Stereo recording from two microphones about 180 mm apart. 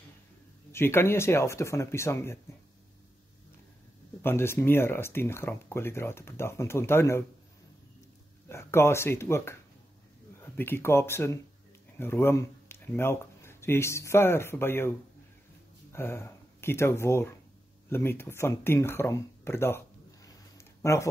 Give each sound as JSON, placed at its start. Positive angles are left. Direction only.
{"t": 0.7, "sound": "speech", "side_deg": 15}
{"t": 4.2, "sound": "speech", "side_deg": 15}
{"t": 8.5, "sound": "speech", "side_deg": 15}
{"t": 20.2, "sound": "a sound", "side_deg": 15}